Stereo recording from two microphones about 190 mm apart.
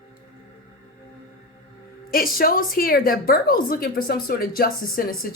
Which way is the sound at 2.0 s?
50° left (ahead or behind).